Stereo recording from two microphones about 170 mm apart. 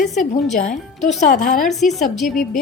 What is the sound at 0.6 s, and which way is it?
A woman's voice, 45° left (ahead or behind).